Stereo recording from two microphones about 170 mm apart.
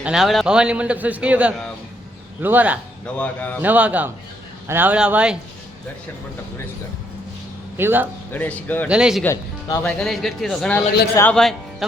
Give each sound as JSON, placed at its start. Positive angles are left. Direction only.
{"t": 0.0, "sound": "a man's voice", "side_deg": -5}
{"t": 3.2, "sound": "speech", "side_deg": 10}
{"t": 3.6, "sound": "a man's voice", "side_deg": -10}
{"t": 7.8, "sound": "a man's voice", "side_deg": -15}
{"t": 8.3, "sound": "speech", "side_deg": 10}
{"t": 8.9, "sound": "speech", "side_deg": -5}
{"t": 9.2, "sound": "speech", "side_deg": 15}
{"t": 9.8, "sound": "speech", "side_deg": 5}